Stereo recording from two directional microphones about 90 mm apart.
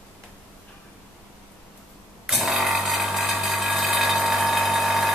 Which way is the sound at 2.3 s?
Centre (ahead or behind).